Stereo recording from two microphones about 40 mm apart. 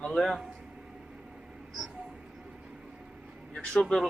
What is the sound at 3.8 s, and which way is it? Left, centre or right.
Speech, centre.